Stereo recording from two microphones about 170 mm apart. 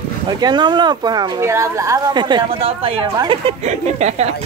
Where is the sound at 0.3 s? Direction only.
25° right (ahead or behind).